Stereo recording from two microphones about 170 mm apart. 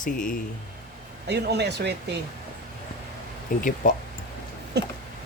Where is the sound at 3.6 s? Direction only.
50° left (ahead or behind).